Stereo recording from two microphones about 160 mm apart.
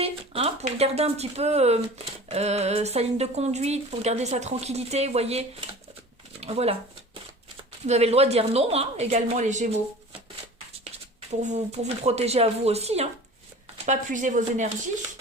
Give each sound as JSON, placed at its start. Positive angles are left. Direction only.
{"t": 0.0, "sound": "speech", "side_deg": -35}
{"t": 10.8, "sound": "speech", "side_deg": -45}